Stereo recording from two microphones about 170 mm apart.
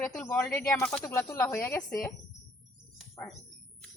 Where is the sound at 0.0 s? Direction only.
15° left (ahead or behind).